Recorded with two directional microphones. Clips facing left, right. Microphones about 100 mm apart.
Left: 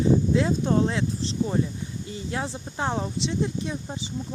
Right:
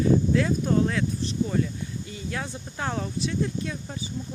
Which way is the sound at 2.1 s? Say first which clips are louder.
Left 5 dB; 25° left (ahead or behind).